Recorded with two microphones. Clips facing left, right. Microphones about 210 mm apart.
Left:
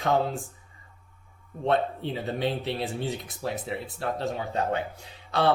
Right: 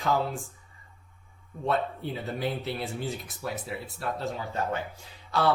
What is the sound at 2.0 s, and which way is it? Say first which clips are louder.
Speech: left 3 dB; 20° left (ahead or behind).